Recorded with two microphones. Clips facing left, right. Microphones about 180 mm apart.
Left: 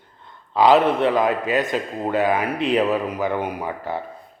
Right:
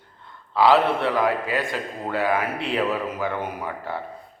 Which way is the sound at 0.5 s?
20° left (ahead or behind).